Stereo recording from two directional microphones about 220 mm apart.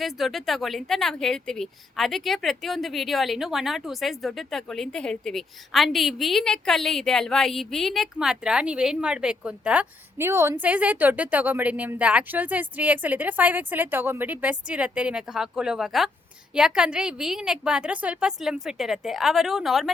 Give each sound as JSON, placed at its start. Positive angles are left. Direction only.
{"t": 0.0, "sound": "speech", "side_deg": 0}